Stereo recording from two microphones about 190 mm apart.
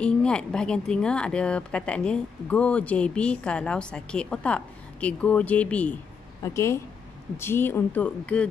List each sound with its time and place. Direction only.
0.0 s speech: 5° left (ahead or behind)